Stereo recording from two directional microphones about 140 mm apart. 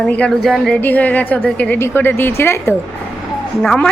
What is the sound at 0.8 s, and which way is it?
Speech, 10° left (ahead or behind).